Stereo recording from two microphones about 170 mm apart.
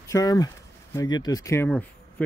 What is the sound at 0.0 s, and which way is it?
Speech, 20° left (ahead or behind).